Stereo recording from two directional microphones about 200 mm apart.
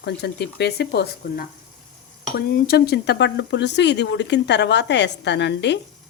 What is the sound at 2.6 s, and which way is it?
Speech, 50° left (ahead or behind).